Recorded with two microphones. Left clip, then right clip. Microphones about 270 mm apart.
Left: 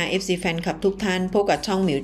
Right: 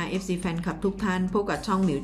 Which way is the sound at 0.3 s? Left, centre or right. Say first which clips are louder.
Left 7 dB; centre.